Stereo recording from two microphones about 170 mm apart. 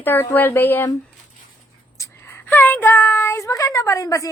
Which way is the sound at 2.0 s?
15° left (ahead or behind).